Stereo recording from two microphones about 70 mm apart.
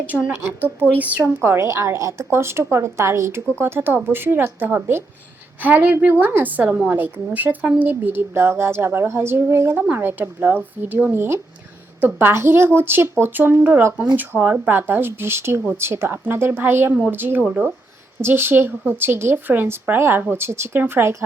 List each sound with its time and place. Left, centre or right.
0.6 s a woman's voice: right
1.2 s a woman's voice: right